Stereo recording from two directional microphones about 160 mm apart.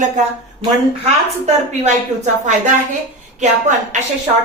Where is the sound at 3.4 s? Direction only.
50° right (ahead or behind).